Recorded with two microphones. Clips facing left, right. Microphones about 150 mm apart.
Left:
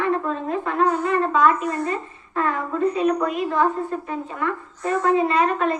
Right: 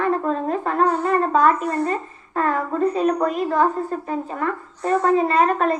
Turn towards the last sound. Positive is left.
turn(degrees=-40)  # may be behind; listen again after turning